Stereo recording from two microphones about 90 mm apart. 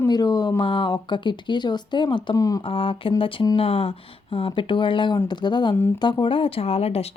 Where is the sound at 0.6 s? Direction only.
70° left (ahead or behind).